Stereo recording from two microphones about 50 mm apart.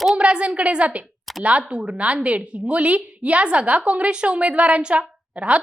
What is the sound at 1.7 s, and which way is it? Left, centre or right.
A woman's voice, right.